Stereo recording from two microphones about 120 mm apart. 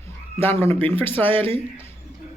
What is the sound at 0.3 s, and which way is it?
Speech, 20° left (ahead or behind).